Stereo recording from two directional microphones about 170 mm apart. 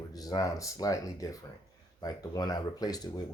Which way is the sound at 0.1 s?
20° left (ahead or behind).